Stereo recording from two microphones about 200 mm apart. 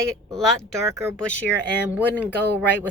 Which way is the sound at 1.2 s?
5° left (ahead or behind).